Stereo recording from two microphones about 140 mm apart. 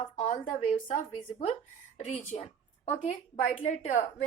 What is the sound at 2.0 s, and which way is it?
A woman's voice, 55° left (ahead or behind).